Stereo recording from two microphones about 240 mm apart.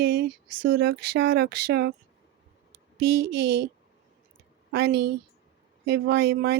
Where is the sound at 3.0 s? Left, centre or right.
Right.